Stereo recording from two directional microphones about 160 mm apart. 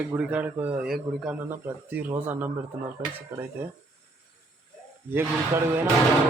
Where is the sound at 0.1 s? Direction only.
10° right (ahead or behind).